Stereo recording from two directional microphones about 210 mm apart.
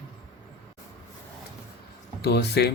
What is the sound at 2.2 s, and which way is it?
Speech, 50° left (ahead or behind).